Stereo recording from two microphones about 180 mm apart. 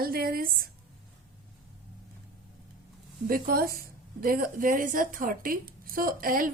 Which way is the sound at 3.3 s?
55° right (ahead or behind).